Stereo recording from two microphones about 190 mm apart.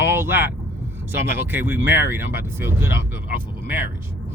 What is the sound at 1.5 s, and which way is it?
Speech, 10° right (ahead or behind).